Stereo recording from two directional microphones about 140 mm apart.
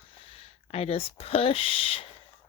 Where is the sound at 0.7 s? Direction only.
45° left (ahead or behind).